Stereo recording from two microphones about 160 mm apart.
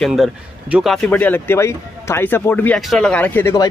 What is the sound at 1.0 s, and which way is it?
A man's voice, 10° left (ahead or behind).